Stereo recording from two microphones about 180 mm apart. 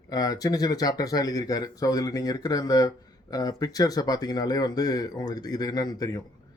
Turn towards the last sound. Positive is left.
turn(degrees=20)  # may be behind; listen again after turning